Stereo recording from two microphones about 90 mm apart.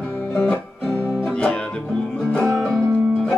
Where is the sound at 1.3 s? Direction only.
15° left (ahead or behind).